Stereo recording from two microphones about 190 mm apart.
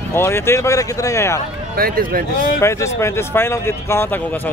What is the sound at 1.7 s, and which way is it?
Speech, 50° right (ahead or behind).